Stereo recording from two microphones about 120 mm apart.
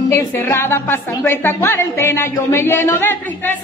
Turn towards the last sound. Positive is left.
turn(degrees=20)  # may be behind; listen again after turning